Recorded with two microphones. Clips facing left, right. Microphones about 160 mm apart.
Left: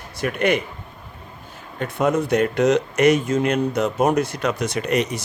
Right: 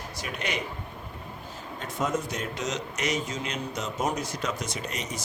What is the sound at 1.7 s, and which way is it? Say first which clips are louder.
Speech: left 9 dB; 60° left (ahead or behind).